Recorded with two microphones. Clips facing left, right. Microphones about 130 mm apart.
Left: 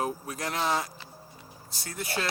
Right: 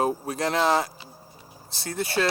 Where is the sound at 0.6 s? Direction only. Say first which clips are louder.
Right 6 dB; 65° right (ahead or behind).